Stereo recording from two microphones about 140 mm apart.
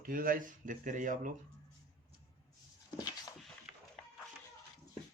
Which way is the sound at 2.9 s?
30° left (ahead or behind).